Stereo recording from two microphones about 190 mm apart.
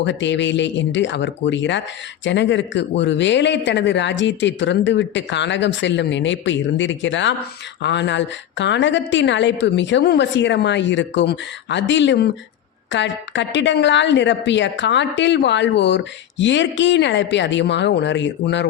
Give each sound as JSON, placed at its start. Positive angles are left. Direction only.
{"t": 0.0, "sound": "speech", "side_deg": 70}